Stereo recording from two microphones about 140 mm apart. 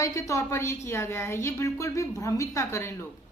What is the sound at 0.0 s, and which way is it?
Speech, 20° left (ahead or behind).